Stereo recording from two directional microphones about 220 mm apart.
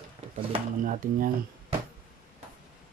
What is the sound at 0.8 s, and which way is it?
Speech, 35° right (ahead or behind).